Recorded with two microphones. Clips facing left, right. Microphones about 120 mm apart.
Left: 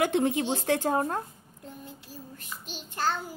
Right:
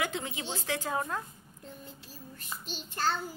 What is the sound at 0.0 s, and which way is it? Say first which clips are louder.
A woman's voice: left 10 dB; 50° left (ahead or behind).